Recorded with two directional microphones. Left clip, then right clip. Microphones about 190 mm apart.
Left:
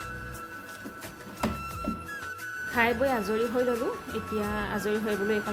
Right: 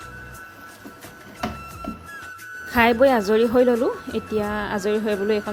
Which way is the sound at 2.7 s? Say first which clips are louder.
Right 9 dB; 40° right (ahead or behind).